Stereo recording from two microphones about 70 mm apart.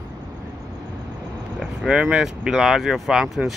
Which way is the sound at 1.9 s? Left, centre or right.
Centre.